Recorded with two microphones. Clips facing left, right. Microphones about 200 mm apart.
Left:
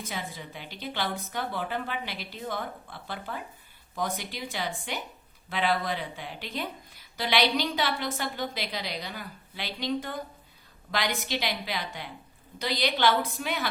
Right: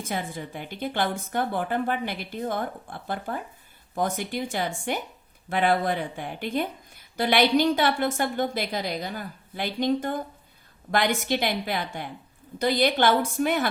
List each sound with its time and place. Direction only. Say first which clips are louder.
0.0 s a woman's voice: right 6 dB; 50° right (ahead or behind)